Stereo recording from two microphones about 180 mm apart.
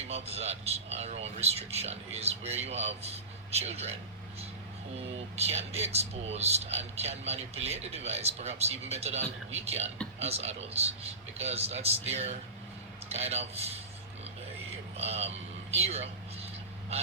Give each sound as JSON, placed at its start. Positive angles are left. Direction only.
{"t": 0.1, "sound": "speech", "side_deg": -35}
{"t": 4.9, "sound": "speech", "side_deg": -35}
{"t": 14.9, "sound": "speech", "side_deg": -35}